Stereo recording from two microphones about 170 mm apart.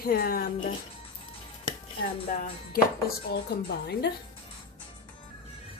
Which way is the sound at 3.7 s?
80° left.